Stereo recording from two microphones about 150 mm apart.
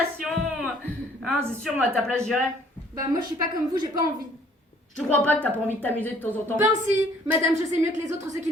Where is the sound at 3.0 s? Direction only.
25° right (ahead or behind).